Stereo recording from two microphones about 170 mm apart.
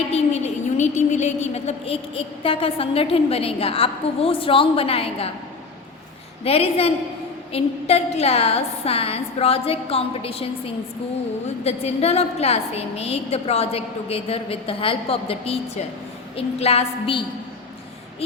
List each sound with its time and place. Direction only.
0.1 s a woman's voice: 40° left (ahead or behind)
6.4 s a woman's voice: 35° left (ahead or behind)